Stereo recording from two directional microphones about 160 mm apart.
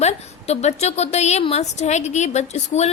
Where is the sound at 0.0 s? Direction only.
40° left (ahead or behind).